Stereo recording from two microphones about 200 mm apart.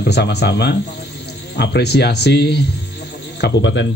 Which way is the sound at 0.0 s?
55° left (ahead or behind).